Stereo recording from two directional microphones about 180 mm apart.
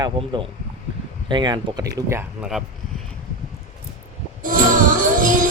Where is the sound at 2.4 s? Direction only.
Centre (ahead or behind).